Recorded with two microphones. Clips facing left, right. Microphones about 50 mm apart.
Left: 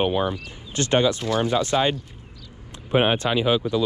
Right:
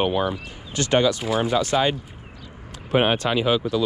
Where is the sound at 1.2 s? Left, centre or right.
Centre.